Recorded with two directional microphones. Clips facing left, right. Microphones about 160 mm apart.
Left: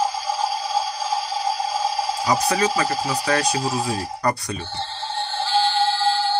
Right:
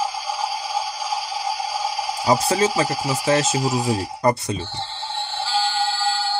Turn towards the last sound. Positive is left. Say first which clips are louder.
# left 3 dB
turn(degrees=-10)  # may be behind; listen again after turning